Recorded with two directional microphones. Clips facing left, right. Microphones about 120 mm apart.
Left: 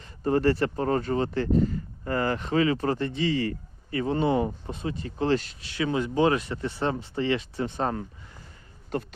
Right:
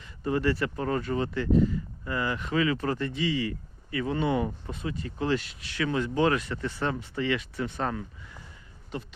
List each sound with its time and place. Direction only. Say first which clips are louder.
0.0 s speech: left 4 dB; 40° left (ahead or behind)
5.7 s speech: left 2 dB; 20° left (ahead or behind)
8.9 s speech: left 6 dB; 45° left (ahead or behind)